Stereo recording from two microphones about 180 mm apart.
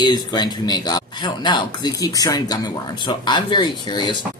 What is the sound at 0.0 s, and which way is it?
Speech, 25° left (ahead or behind).